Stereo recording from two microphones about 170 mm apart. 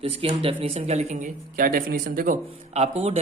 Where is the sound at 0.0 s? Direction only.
35° right (ahead or behind).